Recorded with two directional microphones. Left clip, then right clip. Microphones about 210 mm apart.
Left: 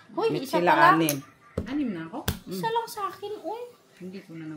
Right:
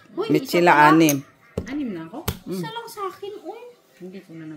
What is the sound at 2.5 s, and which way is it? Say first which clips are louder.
Speech: left 5 dB; 30° left (ahead or behind).